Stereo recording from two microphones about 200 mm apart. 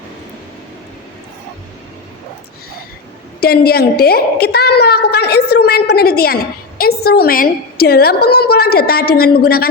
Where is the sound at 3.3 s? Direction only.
50° left (ahead or behind).